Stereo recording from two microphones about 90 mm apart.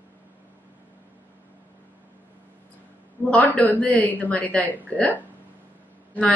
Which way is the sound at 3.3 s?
15° left (ahead or behind).